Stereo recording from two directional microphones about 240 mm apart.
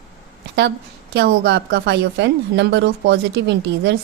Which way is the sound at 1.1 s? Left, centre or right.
Right.